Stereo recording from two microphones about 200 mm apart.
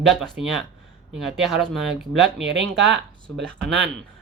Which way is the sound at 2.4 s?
60° right (ahead or behind).